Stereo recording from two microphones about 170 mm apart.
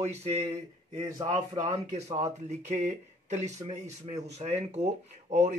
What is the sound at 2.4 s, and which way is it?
Speech, 40° right (ahead or behind).